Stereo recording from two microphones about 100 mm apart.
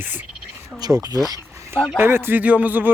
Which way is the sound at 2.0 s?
20° right (ahead or behind).